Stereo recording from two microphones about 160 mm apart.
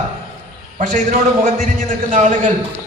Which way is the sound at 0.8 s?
55° right (ahead or behind).